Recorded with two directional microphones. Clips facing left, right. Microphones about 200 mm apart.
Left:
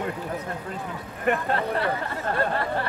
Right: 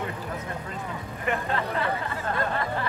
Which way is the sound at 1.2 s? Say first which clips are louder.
Left 4 dB; 35° left (ahead or behind).